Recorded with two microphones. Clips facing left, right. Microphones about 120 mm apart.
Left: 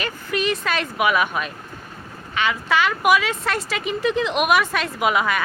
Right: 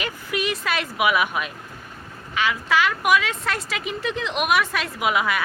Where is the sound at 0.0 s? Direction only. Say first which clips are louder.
Left 2 dB; 10° right (ahead or behind).